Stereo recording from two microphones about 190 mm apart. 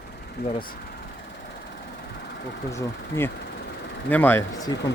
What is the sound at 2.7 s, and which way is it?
Speech, 15° left (ahead or behind).